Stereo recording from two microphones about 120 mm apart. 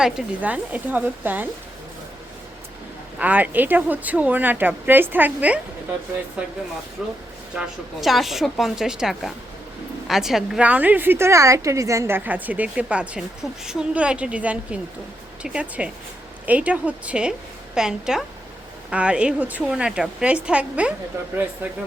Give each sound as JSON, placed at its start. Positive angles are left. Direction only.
{"t": 0.0, "sound": "a woman's voice", "side_deg": -10}
{"t": 3.2, "sound": "a woman's voice", "side_deg": -15}
{"t": 7.0, "sound": "a woman's voice", "side_deg": -5}